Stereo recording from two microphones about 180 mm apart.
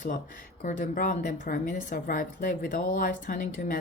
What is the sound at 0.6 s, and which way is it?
A woman's voice, 50° left (ahead or behind).